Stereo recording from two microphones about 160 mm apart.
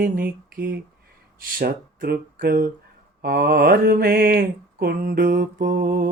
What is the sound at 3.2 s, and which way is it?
Mantra, 75° right (ahead or behind).